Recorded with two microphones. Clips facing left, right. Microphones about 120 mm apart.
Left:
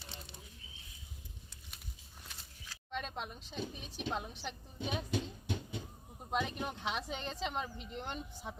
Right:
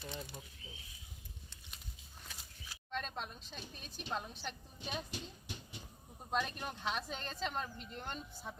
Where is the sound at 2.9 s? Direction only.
15° left (ahead or behind).